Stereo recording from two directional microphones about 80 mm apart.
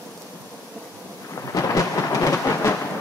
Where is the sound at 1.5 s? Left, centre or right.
Left.